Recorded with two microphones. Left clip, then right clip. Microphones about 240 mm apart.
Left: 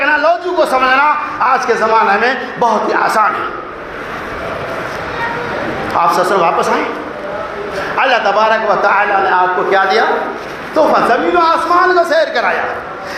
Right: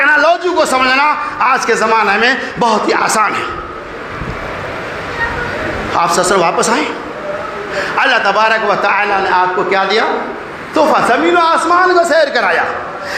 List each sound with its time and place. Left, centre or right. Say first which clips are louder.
0.0 s a man's voice: right 2 dB; right
6.0 s a man's voice: even; right
7.9 s a man's voice: even; right